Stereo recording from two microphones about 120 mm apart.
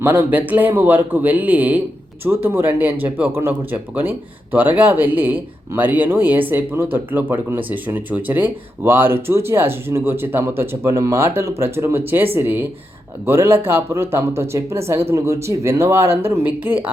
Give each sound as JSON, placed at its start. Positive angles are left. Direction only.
{"t": 0.0, "sound": "speech", "side_deg": -15}